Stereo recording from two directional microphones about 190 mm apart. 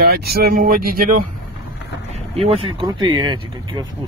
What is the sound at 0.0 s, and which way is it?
Speech, 55° right (ahead or behind).